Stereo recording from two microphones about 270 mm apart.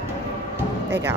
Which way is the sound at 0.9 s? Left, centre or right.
Centre.